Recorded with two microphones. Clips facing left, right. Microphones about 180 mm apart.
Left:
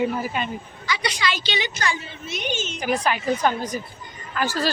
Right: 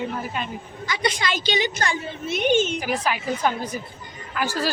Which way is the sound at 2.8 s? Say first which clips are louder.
Left 2 dB; 5° right (ahead or behind).